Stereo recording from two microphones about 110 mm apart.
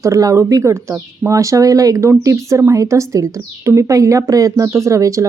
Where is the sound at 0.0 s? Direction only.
30° right (ahead or behind).